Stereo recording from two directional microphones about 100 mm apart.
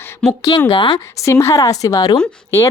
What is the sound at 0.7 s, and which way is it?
Speech, 55° left (ahead or behind).